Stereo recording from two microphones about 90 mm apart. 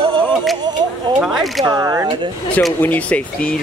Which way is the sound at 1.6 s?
40° right (ahead or behind).